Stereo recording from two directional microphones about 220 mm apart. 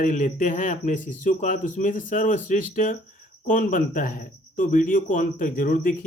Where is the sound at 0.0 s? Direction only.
35° left (ahead or behind).